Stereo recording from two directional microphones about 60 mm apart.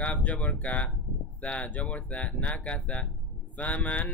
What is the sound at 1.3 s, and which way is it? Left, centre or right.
Mantra, left.